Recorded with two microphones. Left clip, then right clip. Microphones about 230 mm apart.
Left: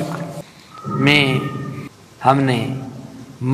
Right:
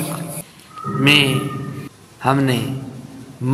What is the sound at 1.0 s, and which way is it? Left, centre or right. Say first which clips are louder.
A man's voice: right 1 dB; right.